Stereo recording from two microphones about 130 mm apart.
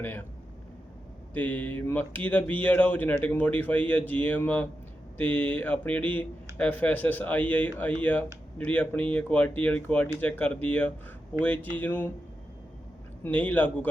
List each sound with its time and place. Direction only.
0.0 s speech: 15° left (ahead or behind)
1.3 s speech: 10° left (ahead or behind)
13.2 s speech: 10° left (ahead or behind)